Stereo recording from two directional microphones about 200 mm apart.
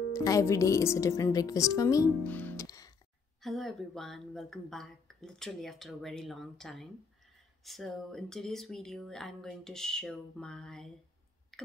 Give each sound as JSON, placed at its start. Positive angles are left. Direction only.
{"t": 0.1, "sound": "speech", "side_deg": 15}
{"t": 3.4, "sound": "speech", "side_deg": 0}
{"t": 11.5, "sound": "a sound", "side_deg": 0}